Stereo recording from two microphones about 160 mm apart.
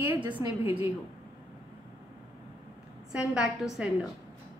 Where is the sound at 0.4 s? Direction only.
20° right (ahead or behind).